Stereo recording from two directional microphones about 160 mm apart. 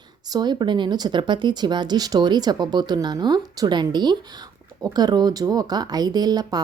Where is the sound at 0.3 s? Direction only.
25° right (ahead or behind).